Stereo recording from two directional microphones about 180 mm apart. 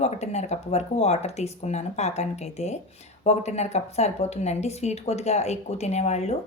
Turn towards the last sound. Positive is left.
turn(degrees=35)  # may be behind; listen again after turning